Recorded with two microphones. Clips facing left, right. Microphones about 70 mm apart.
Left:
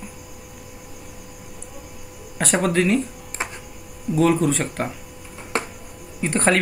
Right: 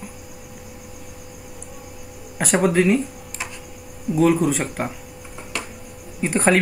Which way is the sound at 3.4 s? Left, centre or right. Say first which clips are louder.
Left 4 dB; left.